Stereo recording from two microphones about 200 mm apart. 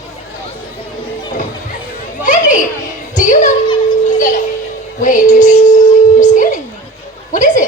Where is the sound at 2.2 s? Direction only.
40° left (ahead or behind).